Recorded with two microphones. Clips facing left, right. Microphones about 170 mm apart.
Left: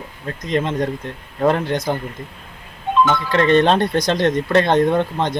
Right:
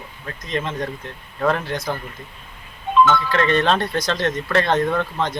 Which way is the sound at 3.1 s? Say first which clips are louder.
Left 3 dB; 15° left (ahead or behind).